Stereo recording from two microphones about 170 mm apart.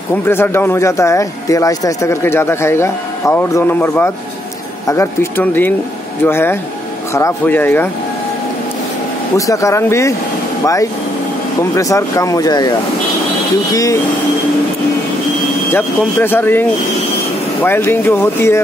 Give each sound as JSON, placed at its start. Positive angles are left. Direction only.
{"t": 0.1, "sound": "speech", "side_deg": 15}
{"t": 9.5, "sound": "speech", "side_deg": 20}
{"t": 15.7, "sound": "speech", "side_deg": 10}
{"t": 17.6, "sound": "speech", "side_deg": 10}